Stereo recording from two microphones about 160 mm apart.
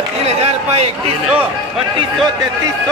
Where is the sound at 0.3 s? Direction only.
40° right (ahead or behind).